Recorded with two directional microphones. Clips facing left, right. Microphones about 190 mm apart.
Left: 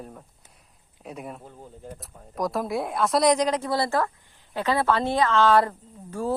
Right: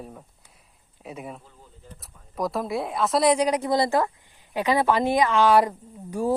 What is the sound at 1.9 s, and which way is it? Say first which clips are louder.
A woman's voice: right 1 dB; centre (ahead or behind).